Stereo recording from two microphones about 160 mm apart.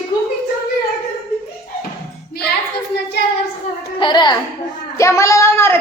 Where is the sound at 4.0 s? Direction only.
30° left (ahead or behind).